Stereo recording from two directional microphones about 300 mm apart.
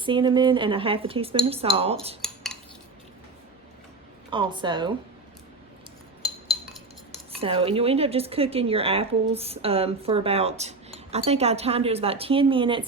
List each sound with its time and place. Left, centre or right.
0.0 s speech: centre
4.3 s speech: centre
7.1 s speech: centre